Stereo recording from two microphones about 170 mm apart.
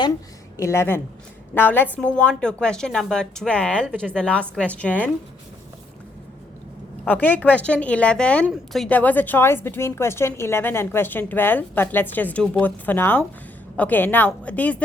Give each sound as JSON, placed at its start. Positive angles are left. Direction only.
{"t": 0.6, "sound": "a woman's voice", "side_deg": 15}
{"t": 7.0, "sound": "a woman's voice", "side_deg": 10}